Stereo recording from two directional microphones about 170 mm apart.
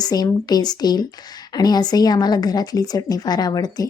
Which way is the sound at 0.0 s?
25° left (ahead or behind).